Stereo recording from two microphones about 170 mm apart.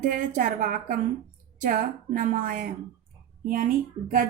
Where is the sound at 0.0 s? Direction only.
55° right (ahead or behind).